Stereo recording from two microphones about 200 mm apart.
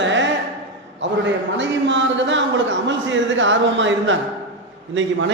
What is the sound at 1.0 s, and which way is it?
A man's voice, 65° right (ahead or behind).